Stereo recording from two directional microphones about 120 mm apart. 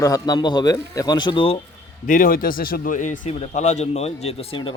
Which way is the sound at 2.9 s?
90° left.